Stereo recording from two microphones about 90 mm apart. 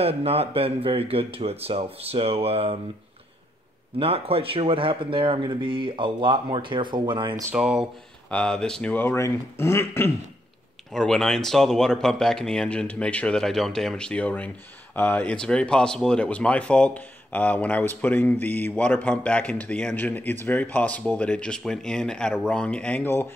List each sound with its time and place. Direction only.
0.0 s speech: 90° right
4.0 s speech: 90° right; by 7.3 s 65° right (ahead or behind)
7.5 s speech: 10° right (ahead or behind)
8.3 s speech: 10° left (ahead or behind)
8.9 s speech: 25° left (ahead or behind)
10.9 s speech: 5° left (ahead or behind)